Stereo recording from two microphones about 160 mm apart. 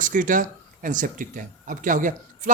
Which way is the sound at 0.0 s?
55° right (ahead or behind).